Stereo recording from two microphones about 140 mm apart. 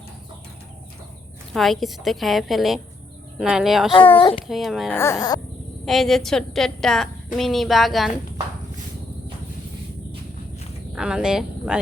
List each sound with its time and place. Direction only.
1.5 s a woman's voice: centre (ahead or behind)
3.9 s speech: 40° left (ahead or behind)
4.4 s a woman's voice: centre (ahead or behind)
4.9 s speech: 20° left (ahead or behind)
5.8 s a woman's voice: centre (ahead or behind)
10.9 s speech: 5° right (ahead or behind)